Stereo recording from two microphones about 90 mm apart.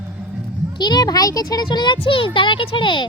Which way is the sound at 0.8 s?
50° left (ahead or behind).